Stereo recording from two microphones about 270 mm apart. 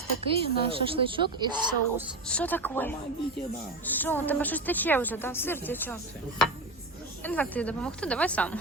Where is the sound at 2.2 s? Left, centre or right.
Centre.